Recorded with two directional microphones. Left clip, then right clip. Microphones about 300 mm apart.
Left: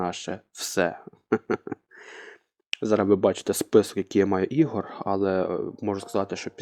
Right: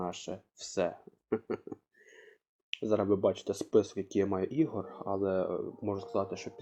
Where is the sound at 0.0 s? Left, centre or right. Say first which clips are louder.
Left 8 dB; left.